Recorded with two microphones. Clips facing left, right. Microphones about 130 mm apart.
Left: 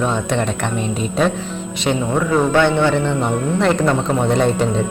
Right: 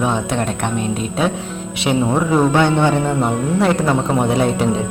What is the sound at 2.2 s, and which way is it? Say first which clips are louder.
Speech: left 1 dB; 15° right (ahead or behind).